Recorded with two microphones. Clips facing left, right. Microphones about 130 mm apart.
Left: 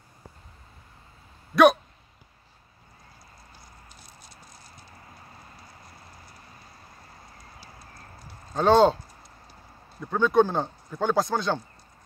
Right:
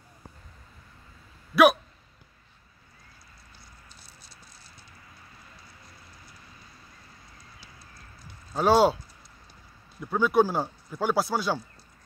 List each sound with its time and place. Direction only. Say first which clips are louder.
1.5 s speech: left 2 dB; 5° right (ahead or behind)
4.0 s patter: left 3 dB; 30° right (ahead or behind)
7.5 s clip-clop: left 4 dB; 45° left (ahead or behind)
8.5 s speech: left 2 dB; 5° right (ahead or behind)
10.1 s speech: left 1 dB; 10° right (ahead or behind)